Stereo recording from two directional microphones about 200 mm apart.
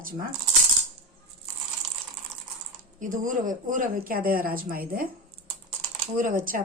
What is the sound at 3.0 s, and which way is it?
Speech, 40° right (ahead or behind).